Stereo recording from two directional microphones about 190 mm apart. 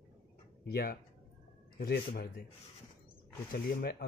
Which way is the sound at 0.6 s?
55° left (ahead or behind).